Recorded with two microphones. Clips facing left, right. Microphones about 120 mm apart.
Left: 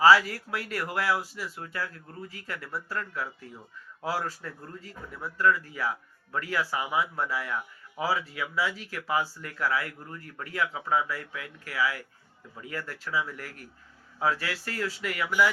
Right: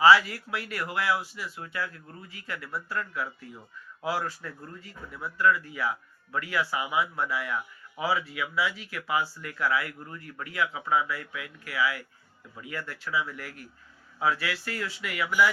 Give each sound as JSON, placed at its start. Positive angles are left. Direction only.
{"t": 0.0, "sound": "speech", "side_deg": 40}